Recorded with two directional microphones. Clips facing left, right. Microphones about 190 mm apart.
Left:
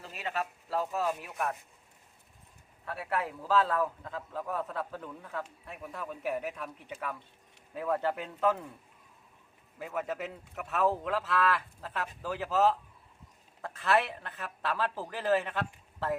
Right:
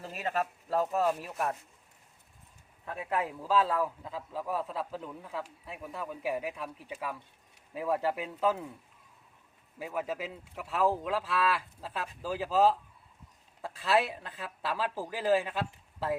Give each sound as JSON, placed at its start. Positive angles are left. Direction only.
{"t": 0.0, "sound": "speech", "side_deg": -40}
{"t": 2.8, "sound": "a man's voice", "side_deg": -15}
{"t": 9.7, "sound": "a man's voice", "side_deg": -10}